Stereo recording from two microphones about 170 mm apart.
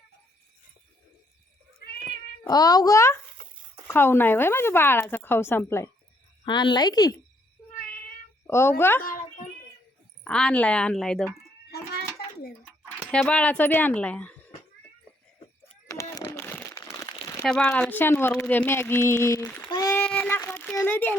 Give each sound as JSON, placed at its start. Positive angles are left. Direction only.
{"t": 2.5, "sound": "speech", "side_deg": 25}
{"t": 6.4, "sound": "speech", "side_deg": 25}
{"t": 8.4, "sound": "speech", "side_deg": 15}
{"t": 10.2, "sound": "a woman's voice", "side_deg": 5}
{"t": 11.7, "sound": "a sound", "side_deg": 70}
{"t": 13.1, "sound": "speech", "side_deg": 5}
{"t": 15.9, "sound": "crumpling", "side_deg": 20}
{"t": 17.4, "sound": "speech", "side_deg": 5}
{"t": 19.6, "sound": "a sound", "side_deg": 20}